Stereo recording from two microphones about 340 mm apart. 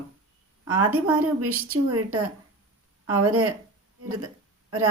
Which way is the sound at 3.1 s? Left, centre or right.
Right.